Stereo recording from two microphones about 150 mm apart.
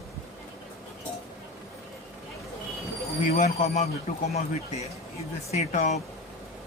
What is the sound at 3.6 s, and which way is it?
Speech, 45° left (ahead or behind).